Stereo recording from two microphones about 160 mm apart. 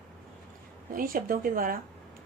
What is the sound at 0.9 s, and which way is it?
Speech, 60° right (ahead or behind).